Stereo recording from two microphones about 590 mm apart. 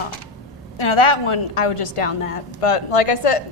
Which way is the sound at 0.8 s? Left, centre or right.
Left.